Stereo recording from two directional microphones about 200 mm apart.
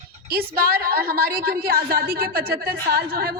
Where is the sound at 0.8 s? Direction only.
50° right (ahead or behind).